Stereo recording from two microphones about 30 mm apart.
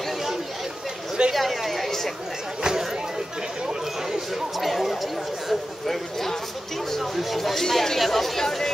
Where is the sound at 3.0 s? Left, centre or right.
Right.